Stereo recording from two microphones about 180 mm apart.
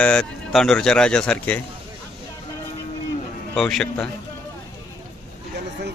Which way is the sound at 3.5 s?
Centre (ahead or behind).